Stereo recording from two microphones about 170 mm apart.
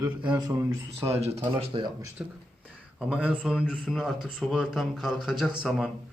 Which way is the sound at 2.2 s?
10° right (ahead or behind).